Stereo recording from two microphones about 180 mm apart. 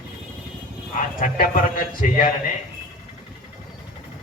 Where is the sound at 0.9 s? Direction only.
50° left (ahead or behind).